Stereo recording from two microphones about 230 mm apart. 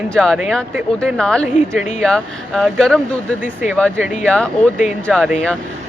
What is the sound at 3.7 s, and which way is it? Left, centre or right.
Speech, centre.